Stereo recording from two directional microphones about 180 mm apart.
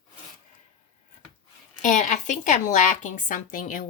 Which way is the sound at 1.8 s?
45° left (ahead or behind).